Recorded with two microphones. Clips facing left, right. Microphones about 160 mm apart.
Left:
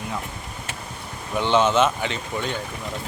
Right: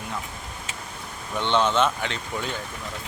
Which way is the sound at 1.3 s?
5° left (ahead or behind).